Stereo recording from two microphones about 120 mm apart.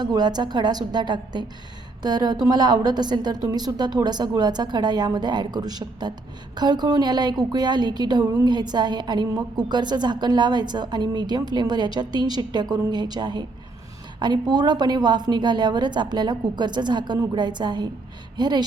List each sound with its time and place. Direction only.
0.0 s a woman's voice: 35° right (ahead or behind)